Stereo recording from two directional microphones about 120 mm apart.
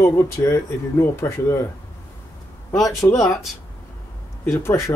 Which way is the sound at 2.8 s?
25° left (ahead or behind).